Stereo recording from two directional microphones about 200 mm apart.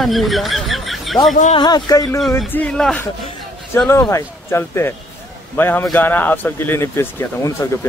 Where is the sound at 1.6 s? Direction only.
20° left (ahead or behind).